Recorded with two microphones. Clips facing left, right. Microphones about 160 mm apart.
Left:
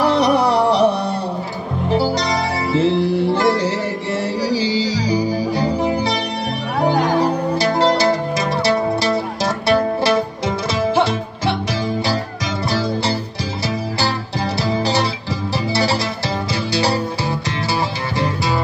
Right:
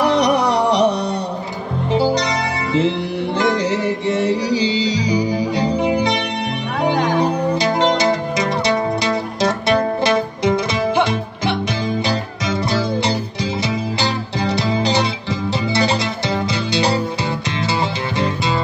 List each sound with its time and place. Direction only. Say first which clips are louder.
0.0 s music: even; 20° right (ahead or behind)
7.2 s music: even; 20° right (ahead or behind)
12.6 s music: even; 20° right (ahead or behind)